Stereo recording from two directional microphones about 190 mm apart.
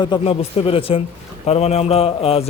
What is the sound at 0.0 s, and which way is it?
A man's voice, 25° left (ahead or behind).